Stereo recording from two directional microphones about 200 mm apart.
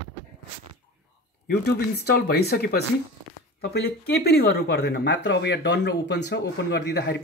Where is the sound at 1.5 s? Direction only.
55° left (ahead or behind).